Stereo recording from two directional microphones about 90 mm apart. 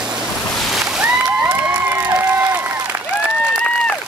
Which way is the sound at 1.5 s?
25° right (ahead or behind).